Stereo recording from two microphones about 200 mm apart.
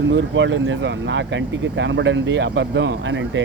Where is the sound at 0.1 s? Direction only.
65° right (ahead or behind).